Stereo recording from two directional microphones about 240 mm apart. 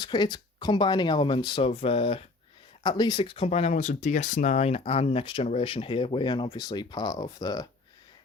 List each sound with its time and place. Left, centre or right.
0.0 s speech: centre